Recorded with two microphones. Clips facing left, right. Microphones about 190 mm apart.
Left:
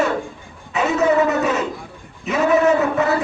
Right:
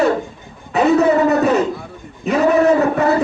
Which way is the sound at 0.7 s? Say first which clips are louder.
Right 4 dB; 35° right (ahead or behind).